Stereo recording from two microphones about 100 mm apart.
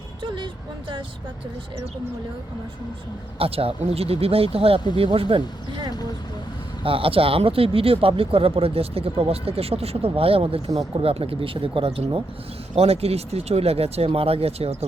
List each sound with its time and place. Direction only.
0.2 s a sound: 60° right (ahead or behind)
3.3 s speech: 70° right (ahead or behind)
6.8 s speech: 65° right (ahead or behind)
10.8 s speech: 80° right
12.7 s speech: 90° right